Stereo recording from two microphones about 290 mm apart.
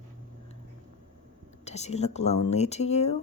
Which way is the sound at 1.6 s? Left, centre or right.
Left.